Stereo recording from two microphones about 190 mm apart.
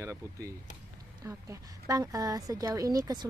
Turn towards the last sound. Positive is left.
turn(degrees=-20)  # may be behind; listen again after turning